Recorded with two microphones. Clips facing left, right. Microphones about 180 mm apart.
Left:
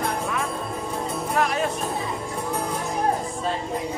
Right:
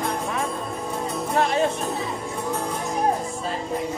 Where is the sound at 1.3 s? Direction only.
25° right (ahead or behind).